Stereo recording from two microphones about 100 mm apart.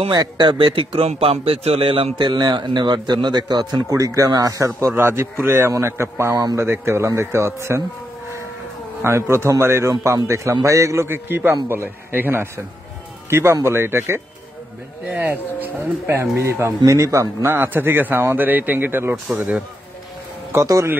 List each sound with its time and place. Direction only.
0.1 s speech: 45° right (ahead or behind)
3.9 s a man's voice: 35° right (ahead or behind)
9.0 s a man's voice: 25° right (ahead or behind)
20.5 s a man's voice: 30° right (ahead or behind)